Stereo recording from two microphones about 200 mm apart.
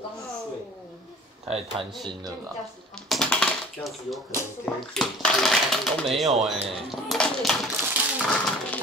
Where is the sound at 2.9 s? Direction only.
5° left (ahead or behind).